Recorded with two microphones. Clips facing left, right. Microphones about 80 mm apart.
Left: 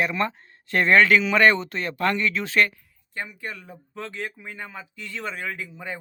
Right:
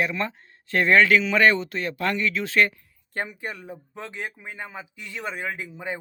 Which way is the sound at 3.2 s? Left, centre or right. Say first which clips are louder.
Right 2 dB; right.